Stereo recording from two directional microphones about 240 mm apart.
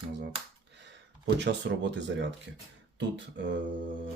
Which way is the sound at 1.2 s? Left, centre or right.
Right.